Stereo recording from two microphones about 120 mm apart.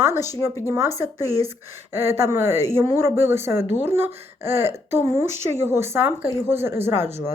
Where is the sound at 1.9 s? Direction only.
20° right (ahead or behind).